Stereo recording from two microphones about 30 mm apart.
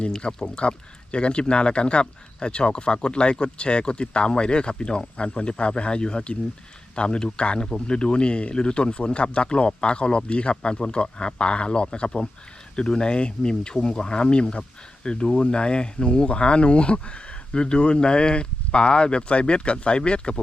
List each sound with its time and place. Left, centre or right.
0.3 s speech: left